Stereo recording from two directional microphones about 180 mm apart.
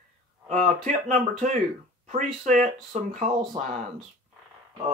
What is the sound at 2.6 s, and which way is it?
Speech, 45° right (ahead or behind).